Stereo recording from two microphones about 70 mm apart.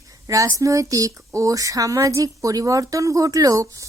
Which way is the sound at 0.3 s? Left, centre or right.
Right.